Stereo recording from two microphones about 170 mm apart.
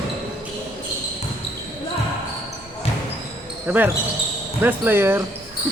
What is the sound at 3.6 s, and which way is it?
Speech, 10° right (ahead or behind).